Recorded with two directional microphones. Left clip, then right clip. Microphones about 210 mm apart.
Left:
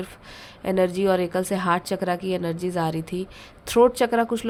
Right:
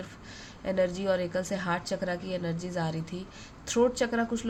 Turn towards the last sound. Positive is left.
turn(degrees=50)  # may be behind; listen again after turning